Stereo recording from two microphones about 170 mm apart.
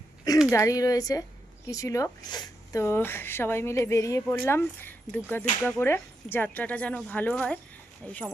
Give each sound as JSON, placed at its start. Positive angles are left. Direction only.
{"t": 0.5, "sound": "speech", "side_deg": 20}